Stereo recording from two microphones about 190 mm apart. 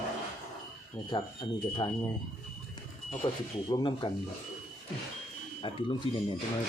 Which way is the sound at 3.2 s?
20° left (ahead or behind).